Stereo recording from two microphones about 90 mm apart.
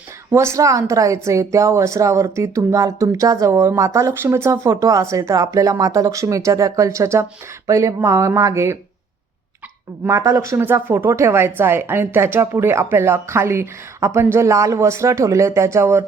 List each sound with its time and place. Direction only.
0.3 s speech: 35° right (ahead or behind)
10.1 s speech: 35° right (ahead or behind)